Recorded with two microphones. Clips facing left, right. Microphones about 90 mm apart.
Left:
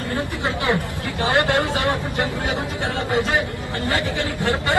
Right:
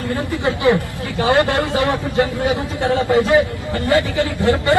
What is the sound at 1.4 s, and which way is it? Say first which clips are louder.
Speech: right 3 dB; 20° left (ahead or behind).